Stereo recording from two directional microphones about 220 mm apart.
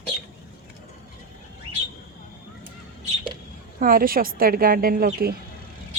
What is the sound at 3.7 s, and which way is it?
A woman's voice, 40° right (ahead or behind).